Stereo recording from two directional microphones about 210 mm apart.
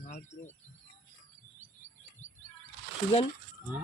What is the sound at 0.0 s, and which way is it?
Speech, 35° left (ahead or behind).